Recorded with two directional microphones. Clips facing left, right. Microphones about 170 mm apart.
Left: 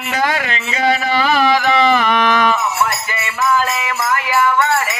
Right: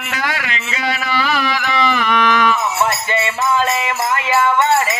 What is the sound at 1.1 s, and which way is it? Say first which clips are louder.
Carnatic music: left 3 dB; 35° left (ahead or behind).